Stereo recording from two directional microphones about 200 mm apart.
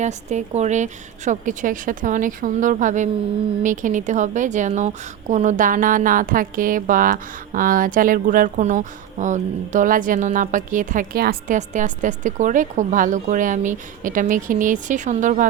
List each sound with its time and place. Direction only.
0.0 s a woman's voice: 35° right (ahead or behind)